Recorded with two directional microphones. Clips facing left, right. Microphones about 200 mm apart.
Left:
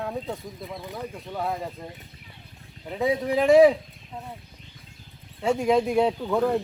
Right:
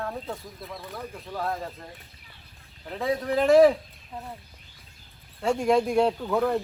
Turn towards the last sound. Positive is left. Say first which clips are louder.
# left 1 dB
turn(degrees=0)  # may be behind; listen again after turning